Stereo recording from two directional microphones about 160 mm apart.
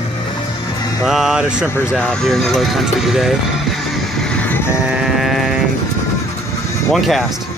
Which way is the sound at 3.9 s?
5° left (ahead or behind).